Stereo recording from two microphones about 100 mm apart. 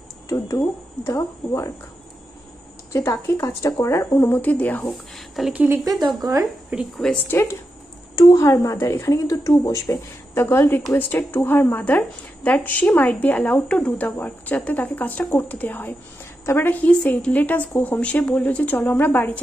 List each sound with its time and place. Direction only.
0.3 s speech: 30° left (ahead or behind)
2.9 s speech: 30° left (ahead or behind)
4.8 s speech: centre (ahead or behind)
5.5 s speech: 15° right (ahead or behind)
5.9 s speech: centre (ahead or behind)
8.2 s speech: 35° left (ahead or behind)
10.3 s speech: 25° left (ahead or behind)